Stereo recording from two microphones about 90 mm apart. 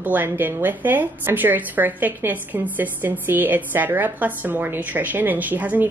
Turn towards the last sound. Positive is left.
turn(degrees=-20)  # may be behind; listen again after turning